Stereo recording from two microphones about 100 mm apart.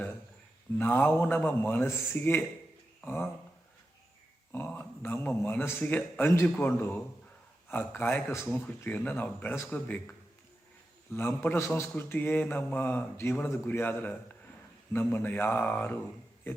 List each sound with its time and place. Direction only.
0.8 s speech: 20° left (ahead or behind)
4.5 s speech: 20° left (ahead or behind)